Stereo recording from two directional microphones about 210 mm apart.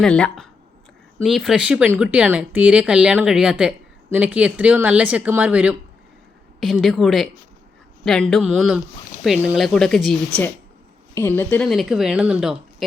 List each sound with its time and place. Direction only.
0.0 s speech: 5° left (ahead or behind)